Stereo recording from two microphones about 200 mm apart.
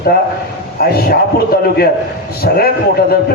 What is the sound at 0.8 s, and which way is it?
Speech, 50° left (ahead or behind).